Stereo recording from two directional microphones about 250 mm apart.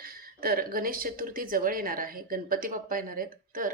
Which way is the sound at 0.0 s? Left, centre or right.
Right.